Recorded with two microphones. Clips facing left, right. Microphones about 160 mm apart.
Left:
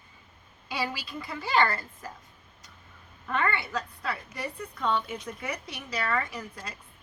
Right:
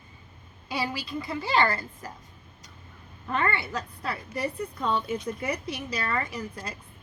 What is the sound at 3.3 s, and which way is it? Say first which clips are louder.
Speech: right 1 dB; 30° right (ahead or behind).